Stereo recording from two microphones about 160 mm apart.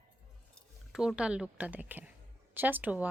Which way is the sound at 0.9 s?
5° right (ahead or behind).